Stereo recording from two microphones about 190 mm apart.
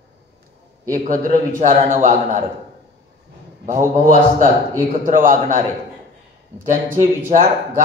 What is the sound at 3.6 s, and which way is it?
A man's voice, 45° right (ahead or behind).